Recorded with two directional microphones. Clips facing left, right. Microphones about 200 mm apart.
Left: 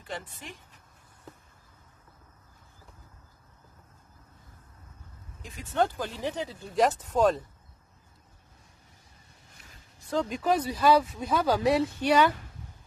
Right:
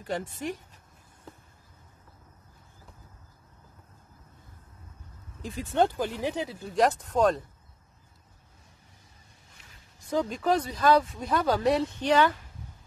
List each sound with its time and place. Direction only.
0.0 s speech: 45° right (ahead or behind)
5.4 s speech: 30° right (ahead or behind)
5.9 s speech: 15° right (ahead or behind)
6.6 s speech: centre (ahead or behind)
9.9 s a sound: 15° right (ahead or behind)
10.3 s speech: 10° left (ahead or behind)